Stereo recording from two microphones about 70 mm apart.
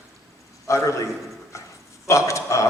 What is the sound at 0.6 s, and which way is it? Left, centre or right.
Speech, left.